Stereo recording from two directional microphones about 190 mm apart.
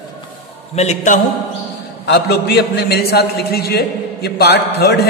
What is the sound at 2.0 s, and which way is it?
A man's voice, 60° left (ahead or behind).